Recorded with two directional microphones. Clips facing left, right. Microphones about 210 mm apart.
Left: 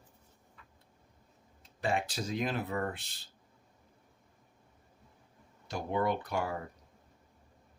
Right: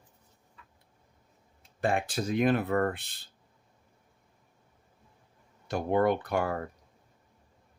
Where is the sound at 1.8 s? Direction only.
55° right (ahead or behind).